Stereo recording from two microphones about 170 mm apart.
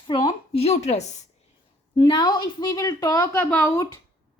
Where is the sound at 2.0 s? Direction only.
25° left (ahead or behind).